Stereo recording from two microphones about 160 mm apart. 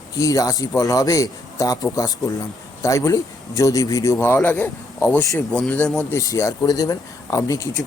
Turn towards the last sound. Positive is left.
turn(degrees=20)  # may be behind; listen again after turning